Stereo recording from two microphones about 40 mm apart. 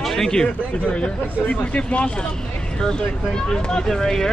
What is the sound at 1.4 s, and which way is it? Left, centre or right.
Speech, left.